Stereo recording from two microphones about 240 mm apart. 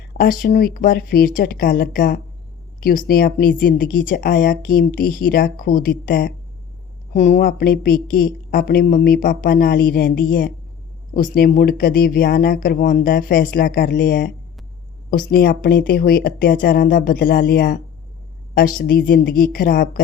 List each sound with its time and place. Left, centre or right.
0.2 s speech: left